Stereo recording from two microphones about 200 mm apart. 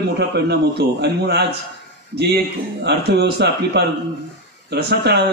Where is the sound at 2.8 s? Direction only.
55° right (ahead or behind).